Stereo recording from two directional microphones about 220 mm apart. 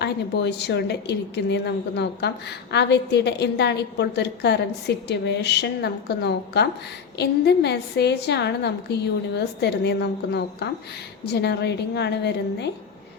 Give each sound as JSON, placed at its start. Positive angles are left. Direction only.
{"t": 0.0, "sound": "a woman's voice", "side_deg": 50}